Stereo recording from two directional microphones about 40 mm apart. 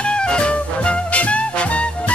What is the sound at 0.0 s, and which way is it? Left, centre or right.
Music, left.